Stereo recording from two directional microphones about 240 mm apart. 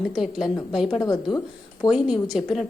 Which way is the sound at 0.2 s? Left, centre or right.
Centre.